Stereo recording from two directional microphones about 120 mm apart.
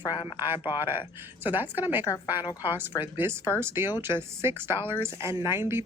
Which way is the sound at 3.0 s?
15° right (ahead or behind).